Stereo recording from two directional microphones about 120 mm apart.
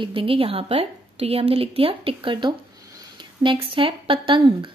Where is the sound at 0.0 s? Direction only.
50° right (ahead or behind).